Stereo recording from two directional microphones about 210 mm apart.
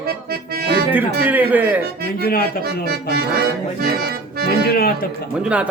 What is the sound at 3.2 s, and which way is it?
Accordion, 50° right (ahead or behind).